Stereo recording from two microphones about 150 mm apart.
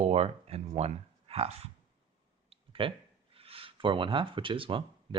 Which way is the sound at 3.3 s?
40° right (ahead or behind).